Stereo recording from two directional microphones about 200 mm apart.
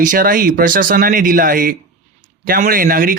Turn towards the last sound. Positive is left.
turn(degrees=-45)  # may be behind; listen again after turning